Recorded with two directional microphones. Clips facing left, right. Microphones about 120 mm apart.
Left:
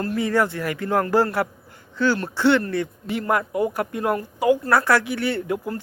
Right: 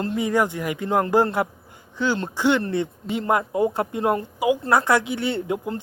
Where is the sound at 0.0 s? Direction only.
20° right (ahead or behind).